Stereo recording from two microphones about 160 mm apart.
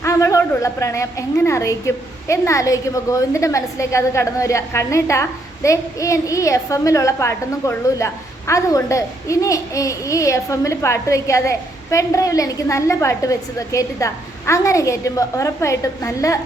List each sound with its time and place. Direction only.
0.0 s a woman's voice: 20° left (ahead or behind)